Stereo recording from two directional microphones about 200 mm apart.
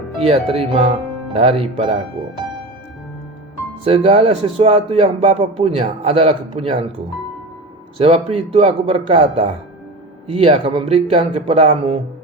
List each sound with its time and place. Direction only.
0.3 s a man's voice: 30° right (ahead or behind)
3.8 s a man's voice: 30° right (ahead or behind)
7.9 s a man's voice: 30° right (ahead or behind)